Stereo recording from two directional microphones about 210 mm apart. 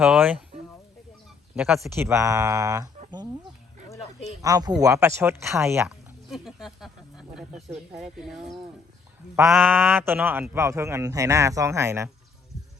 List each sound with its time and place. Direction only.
0.0 s speech: 5° right (ahead or behind)
1.5 s speech: centre (ahead or behind)
2.0 s speech: 15° right (ahead or behind)
4.4 s speech: 15° right (ahead or behind)
6.3 s speech: centre (ahead or behind)